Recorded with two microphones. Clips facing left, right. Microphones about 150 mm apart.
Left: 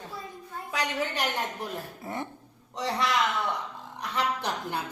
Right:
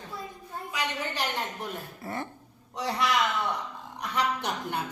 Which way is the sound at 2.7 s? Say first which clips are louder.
Even; centre (ahead or behind).